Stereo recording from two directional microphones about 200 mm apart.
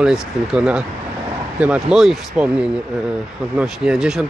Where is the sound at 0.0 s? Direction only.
5° right (ahead or behind).